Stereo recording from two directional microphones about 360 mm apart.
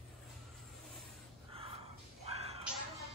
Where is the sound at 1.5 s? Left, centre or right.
Centre.